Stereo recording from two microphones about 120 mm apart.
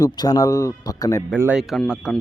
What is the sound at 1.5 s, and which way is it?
Speech, 5° right (ahead or behind).